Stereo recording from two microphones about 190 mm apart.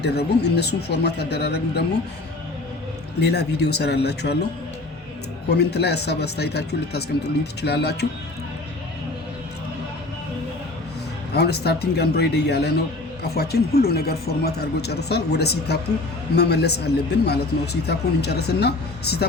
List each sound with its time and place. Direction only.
0.0 s speech: 60° left (ahead or behind)
3.2 s speech: 60° left (ahead or behind)
5.5 s speech: 60° left (ahead or behind)
11.3 s speech: 60° left (ahead or behind)